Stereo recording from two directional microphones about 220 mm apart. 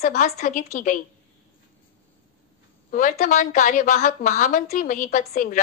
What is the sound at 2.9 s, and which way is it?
A woman's voice, 35° left (ahead or behind).